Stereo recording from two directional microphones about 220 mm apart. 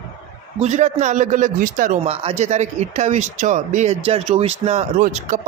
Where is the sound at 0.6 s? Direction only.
30° right (ahead or behind).